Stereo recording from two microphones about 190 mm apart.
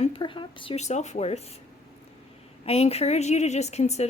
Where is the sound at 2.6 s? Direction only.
30° left (ahead or behind).